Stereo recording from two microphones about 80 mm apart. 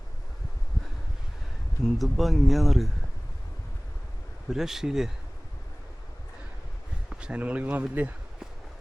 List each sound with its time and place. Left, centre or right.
1.8 s speech: centre
4.4 s speech: centre
7.1 s speech: centre